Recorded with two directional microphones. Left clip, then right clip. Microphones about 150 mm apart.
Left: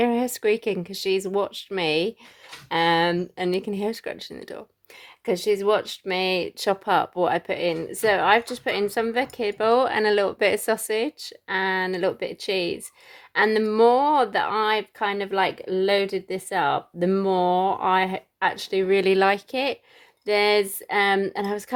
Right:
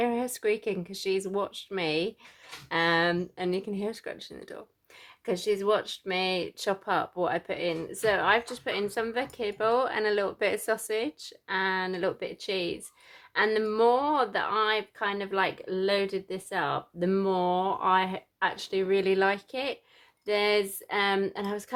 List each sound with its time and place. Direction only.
0.0 s speech: 40° left (ahead or behind)